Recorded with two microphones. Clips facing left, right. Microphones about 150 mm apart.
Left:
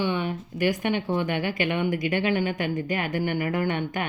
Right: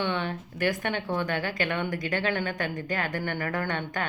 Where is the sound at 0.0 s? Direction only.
10° left (ahead or behind).